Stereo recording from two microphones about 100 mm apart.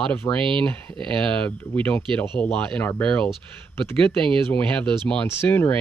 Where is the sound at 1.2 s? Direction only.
10° left (ahead or behind).